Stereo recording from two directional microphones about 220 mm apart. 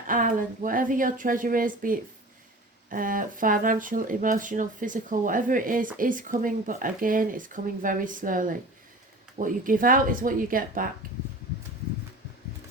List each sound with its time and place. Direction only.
0.1 s speech: 40° right (ahead or behind)